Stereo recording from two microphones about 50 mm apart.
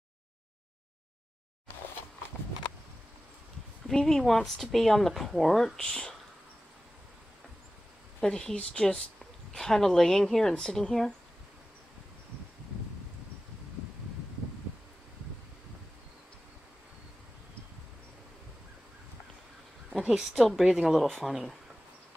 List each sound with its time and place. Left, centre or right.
3.8 s speech: centre
8.2 s speech: centre
9.5 s speech: centre
20.3 s speech: centre